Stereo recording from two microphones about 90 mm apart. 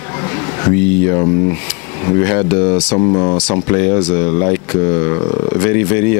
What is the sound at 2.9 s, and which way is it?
Speech, 30° left (ahead or behind).